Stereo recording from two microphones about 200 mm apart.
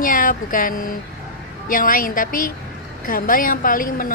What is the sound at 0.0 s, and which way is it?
A woman's voice, 45° left (ahead or behind).